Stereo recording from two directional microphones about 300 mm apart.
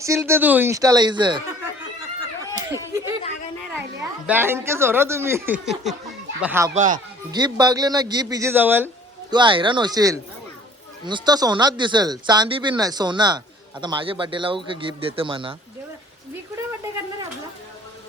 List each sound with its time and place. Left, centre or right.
0.0 s speech: centre
2.0 s a sound: centre
4.3 s speech: centre
6.7 s speech: right
7.3 s speech: centre